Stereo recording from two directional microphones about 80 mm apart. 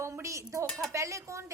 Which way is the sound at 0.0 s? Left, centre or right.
Right.